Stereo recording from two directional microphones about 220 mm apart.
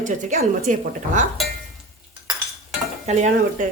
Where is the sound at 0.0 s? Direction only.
35° right (ahead or behind).